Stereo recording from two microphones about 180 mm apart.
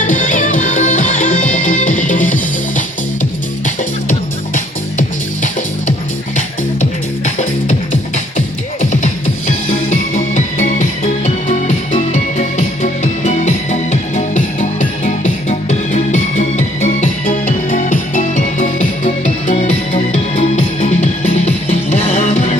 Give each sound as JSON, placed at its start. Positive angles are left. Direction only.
{"t": 0.0, "sound": "music", "side_deg": 45}
{"t": 7.3, "sound": "music", "side_deg": 45}
{"t": 10.2, "sound": "music", "side_deg": 45}